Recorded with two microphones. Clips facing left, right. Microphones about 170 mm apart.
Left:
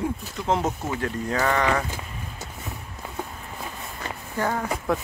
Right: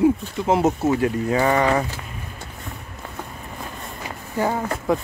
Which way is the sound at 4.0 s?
10° right (ahead or behind).